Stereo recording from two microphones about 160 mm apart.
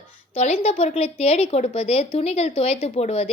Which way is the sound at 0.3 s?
40° left (ahead or behind).